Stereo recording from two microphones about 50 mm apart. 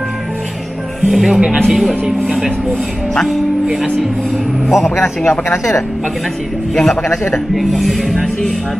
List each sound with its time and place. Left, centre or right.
1.0 s speech: centre
1.7 s music: centre
4.6 s a man's voice: centre
4.9 s a man's voice: left
6.8 s a man's voice: centre
7.5 s music: centre